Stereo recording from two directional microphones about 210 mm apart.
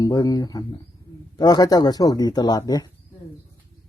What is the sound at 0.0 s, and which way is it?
Speech, 15° left (ahead or behind).